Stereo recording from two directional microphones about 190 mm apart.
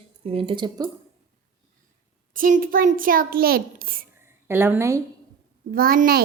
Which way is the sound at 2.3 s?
45° right (ahead or behind).